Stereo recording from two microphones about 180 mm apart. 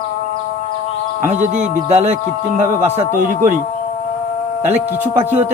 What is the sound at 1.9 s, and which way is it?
Speech, 40° right (ahead or behind).